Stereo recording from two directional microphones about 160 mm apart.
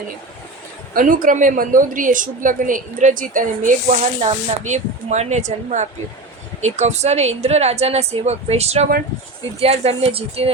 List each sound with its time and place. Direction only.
0.9 s a woman's voice: 55° right (ahead or behind)
4.3 s speech: 45° right (ahead or behind)